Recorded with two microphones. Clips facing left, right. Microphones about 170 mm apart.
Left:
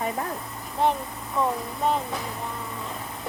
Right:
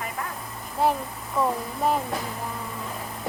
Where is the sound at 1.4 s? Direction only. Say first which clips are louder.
Right 1 dB; 5° right (ahead or behind).